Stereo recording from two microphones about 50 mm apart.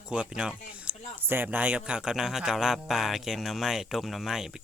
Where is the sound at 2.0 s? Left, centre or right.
Centre.